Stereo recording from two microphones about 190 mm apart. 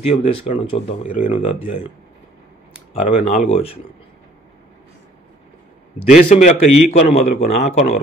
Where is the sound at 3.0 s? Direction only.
35° left (ahead or behind).